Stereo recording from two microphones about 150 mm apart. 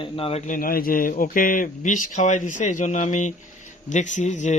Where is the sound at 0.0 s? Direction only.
40° left (ahead or behind).